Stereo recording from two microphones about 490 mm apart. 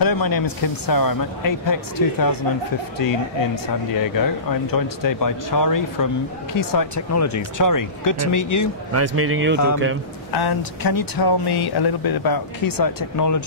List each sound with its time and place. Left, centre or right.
0.0 s speech: left
3.6 s speech: left
8.9 s speech: right
10.3 s speech: left